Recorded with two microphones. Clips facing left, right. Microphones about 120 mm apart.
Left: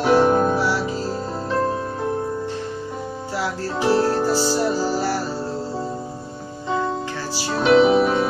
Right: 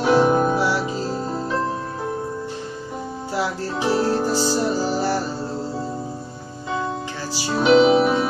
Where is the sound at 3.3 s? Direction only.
15° right (ahead or behind).